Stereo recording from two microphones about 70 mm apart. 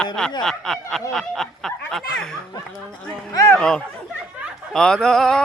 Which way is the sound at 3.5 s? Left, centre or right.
Centre.